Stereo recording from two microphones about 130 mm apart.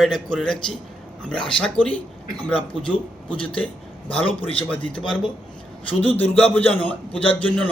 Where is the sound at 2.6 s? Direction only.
40° left (ahead or behind).